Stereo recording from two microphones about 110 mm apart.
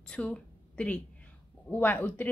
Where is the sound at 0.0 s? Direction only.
10° left (ahead or behind).